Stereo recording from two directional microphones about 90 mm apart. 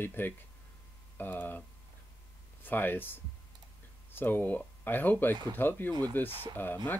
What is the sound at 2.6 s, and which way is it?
Speech, 20° left (ahead or behind).